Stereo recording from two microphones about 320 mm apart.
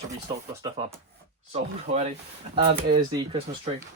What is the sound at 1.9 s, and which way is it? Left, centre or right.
Speech, right.